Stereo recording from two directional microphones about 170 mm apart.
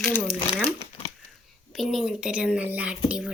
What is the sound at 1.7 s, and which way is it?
Speech, centre (ahead or behind).